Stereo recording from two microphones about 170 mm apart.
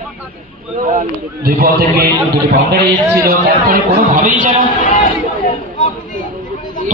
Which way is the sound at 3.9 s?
45° right (ahead or behind).